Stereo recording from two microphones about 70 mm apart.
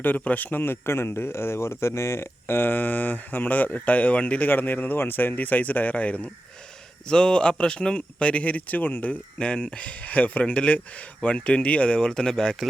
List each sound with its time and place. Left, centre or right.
0.0 s a man's voice: left; by 12.6 s centre